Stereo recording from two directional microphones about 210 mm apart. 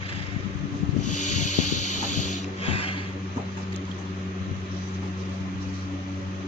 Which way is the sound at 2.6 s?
25° left (ahead or behind).